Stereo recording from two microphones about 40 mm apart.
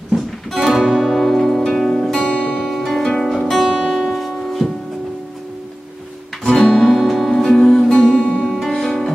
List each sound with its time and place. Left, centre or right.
0.5 s music: centre
2.2 s music: left
2.6 s music: centre
3.1 s music: centre
3.3 s music: centre
6.4 s guitar: centre
6.7 s music: centre
7.9 s music: left
8.4 s music: centre